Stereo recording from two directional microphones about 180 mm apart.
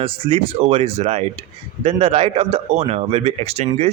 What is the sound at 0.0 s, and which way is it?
A man's voice, 30° right (ahead or behind).